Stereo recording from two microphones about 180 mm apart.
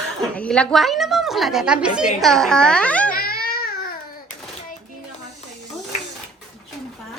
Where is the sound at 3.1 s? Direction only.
55° left (ahead or behind).